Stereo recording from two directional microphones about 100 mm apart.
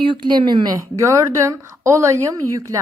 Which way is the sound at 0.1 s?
50° right (ahead or behind).